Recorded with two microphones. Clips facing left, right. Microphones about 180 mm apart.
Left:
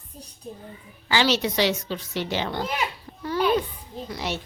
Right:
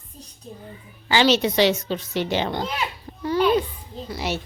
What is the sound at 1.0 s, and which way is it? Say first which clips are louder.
Speech: right 4 dB; 20° right (ahead or behind).